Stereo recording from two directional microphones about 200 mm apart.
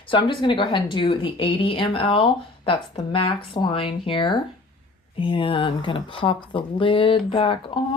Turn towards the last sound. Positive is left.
turn(degrees=25)  # may be behind; listen again after turning